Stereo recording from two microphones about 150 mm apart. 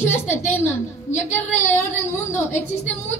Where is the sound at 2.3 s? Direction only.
50° left (ahead or behind).